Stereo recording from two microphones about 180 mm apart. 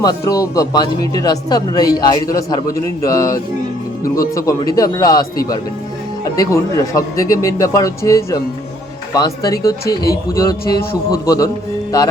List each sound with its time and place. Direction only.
0.0 s speech: 20° left (ahead or behind)
11.3 s speech: 20° left (ahead or behind)